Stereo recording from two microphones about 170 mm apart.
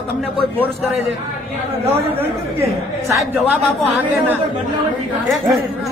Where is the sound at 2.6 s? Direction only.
15° right (ahead or behind).